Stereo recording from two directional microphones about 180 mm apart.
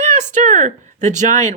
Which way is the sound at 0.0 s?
40° right (ahead or behind).